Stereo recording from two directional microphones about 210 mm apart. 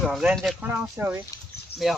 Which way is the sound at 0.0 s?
5° right (ahead or behind).